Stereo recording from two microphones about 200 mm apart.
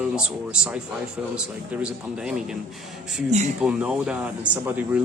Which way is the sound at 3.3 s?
35° right (ahead or behind).